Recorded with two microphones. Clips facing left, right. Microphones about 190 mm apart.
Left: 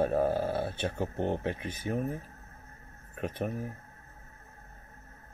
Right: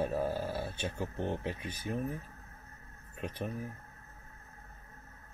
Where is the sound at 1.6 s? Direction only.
25° left (ahead or behind).